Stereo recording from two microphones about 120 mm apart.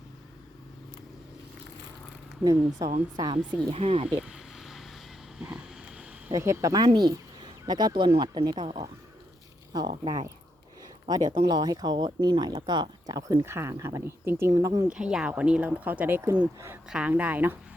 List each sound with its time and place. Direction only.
2.4 s speech: 35° right (ahead or behind)
3.7 s speech: 50° right (ahead or behind)
4.2 s a sound: 5° right (ahead or behind)
6.3 s speech: 25° right (ahead or behind); by 8.9 s 45° right (ahead or behind)
10.0 s speech: 35° right (ahead or behind)
13.4 s speech: 20° right (ahead or behind)
14.8 s speech: 5° right (ahead or behind)